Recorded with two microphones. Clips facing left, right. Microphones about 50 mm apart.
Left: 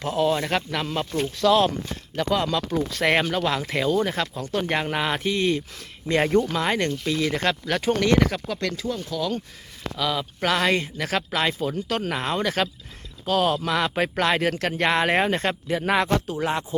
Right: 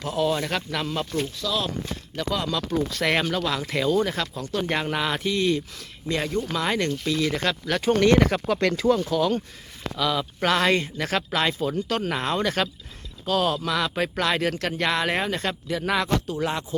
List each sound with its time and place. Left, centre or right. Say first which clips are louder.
0.2 s speech: left 2 dB; centre
4.4 s speech: left 1 dB; left
4.7 s speech: even; centre
6.1 s speech: left 6 dB; left
6.4 s speech: left 1 dB; centre
7.9 s speech: right 3 dB; centre
8.3 s speech: right 5 dB; right
8.8 s speech: right 8 dB; right
9.0 s speech: right 4 dB; right
10.0 s speech: right 1 dB; centre